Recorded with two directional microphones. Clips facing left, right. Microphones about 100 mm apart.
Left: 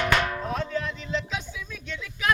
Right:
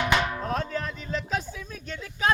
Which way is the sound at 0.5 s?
45° right (ahead or behind).